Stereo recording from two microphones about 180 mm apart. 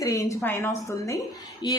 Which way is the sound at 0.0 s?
20° left (ahead or behind).